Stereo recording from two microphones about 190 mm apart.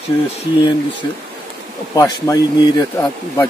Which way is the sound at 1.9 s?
20° left (ahead or behind).